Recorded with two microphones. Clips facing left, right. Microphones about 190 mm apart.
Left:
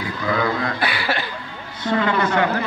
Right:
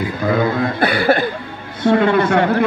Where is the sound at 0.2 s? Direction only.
50° right (ahead or behind).